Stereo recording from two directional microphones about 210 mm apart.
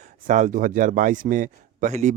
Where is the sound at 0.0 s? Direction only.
35° right (ahead or behind).